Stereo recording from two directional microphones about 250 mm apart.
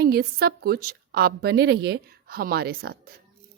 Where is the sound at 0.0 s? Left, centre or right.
Right.